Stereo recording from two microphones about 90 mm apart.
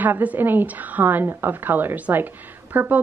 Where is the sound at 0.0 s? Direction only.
20° right (ahead or behind).